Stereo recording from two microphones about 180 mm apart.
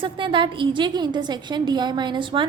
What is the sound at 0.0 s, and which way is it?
A woman's voice, 25° right (ahead or behind).